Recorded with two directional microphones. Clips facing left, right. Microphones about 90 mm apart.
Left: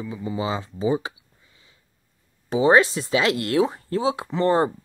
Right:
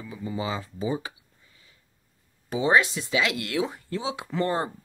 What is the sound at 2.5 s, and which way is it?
Speech, 35° left (ahead or behind).